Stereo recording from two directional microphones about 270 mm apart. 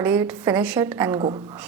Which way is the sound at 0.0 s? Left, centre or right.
Centre.